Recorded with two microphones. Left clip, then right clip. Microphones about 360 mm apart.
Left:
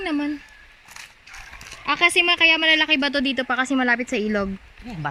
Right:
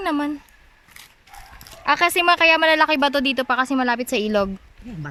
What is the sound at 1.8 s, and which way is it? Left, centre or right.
Speech, centre.